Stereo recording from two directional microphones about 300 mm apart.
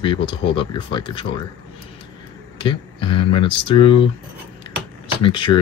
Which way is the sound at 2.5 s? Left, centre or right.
Centre.